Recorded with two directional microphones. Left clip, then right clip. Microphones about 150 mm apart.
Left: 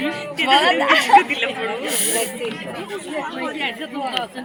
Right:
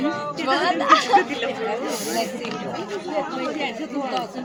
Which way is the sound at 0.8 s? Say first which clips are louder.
Left 2 dB; 10° left (ahead or behind).